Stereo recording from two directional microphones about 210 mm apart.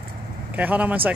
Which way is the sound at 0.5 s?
10° right (ahead or behind).